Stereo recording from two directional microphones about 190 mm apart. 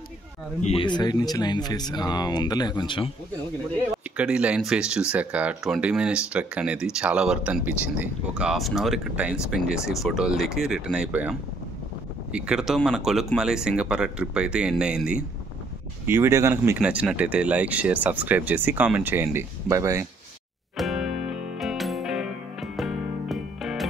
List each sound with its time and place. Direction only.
0.6 s speech: 30° left (ahead or behind)
4.2 s speech: 5° right (ahead or behind)
20.7 s music: centre (ahead or behind)